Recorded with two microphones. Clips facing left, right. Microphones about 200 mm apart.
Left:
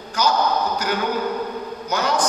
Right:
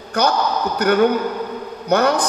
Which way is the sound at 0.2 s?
60° right (ahead or behind).